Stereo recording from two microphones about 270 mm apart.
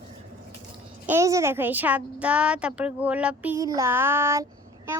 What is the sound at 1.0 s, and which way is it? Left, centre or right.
A woman's voice, centre.